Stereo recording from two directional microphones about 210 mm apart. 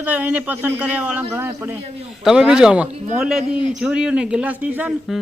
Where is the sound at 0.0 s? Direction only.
5° right (ahead or behind).